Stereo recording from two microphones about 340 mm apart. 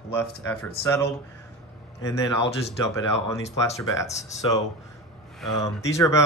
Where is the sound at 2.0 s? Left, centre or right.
Centre.